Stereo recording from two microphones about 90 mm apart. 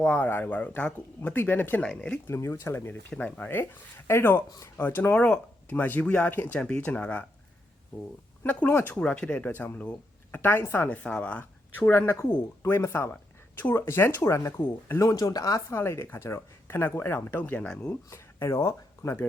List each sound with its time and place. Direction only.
0.0 s speech: 20° left (ahead or behind)
2.2 s speech: 30° left (ahead or behind)
8.4 s speech: 15° left (ahead or behind); by 14.5 s 35° left (ahead or behind)
15.0 s speech: 45° left (ahead or behind)
15.7 s speech: 30° left (ahead or behind)
18.1 s speech: 30° left (ahead or behind)